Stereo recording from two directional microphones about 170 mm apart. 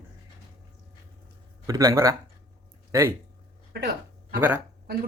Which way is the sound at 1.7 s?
20° right (ahead or behind).